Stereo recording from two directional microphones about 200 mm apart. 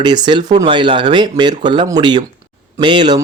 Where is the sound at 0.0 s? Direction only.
20° right (ahead or behind).